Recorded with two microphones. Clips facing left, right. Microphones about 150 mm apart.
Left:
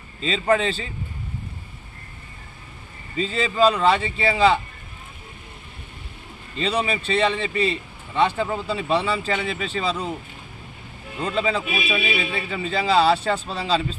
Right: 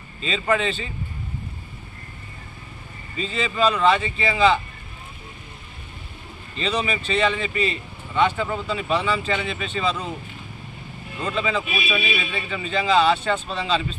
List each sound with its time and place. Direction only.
0.2 s a man's voice: 35° left (ahead or behind)
3.2 s a man's voice: 35° left (ahead or behind)
6.7 s a man's voice: 30° left (ahead or behind)
11.2 s a man's voice: 35° left (ahead or behind)